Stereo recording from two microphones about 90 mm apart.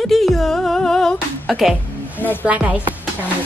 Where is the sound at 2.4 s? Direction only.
15° right (ahead or behind).